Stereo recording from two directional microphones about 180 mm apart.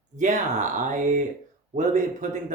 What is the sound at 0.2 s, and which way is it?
Speech, 45° right (ahead or behind).